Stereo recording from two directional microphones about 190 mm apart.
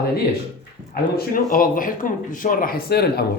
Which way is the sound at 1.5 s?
45° left (ahead or behind).